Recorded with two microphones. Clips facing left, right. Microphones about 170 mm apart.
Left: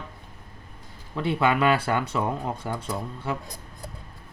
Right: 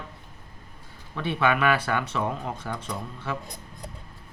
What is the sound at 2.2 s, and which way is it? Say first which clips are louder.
Speech: left 2 dB; 10° left (ahead or behind).